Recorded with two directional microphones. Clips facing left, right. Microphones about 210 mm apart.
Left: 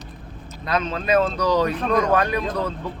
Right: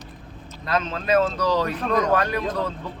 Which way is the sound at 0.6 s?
15° left (ahead or behind).